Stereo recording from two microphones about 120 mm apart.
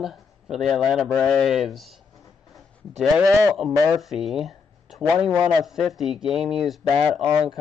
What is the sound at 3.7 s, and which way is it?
Speech, 30° right (ahead or behind).